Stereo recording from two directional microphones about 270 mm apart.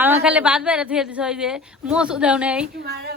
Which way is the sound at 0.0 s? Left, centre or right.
Centre.